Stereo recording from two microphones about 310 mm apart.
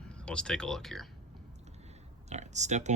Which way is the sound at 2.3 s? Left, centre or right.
Right.